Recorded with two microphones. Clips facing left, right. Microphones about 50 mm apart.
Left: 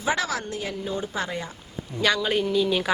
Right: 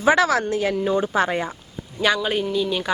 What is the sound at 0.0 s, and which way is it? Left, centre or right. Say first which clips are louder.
A woman's voice: right 8 dB; right.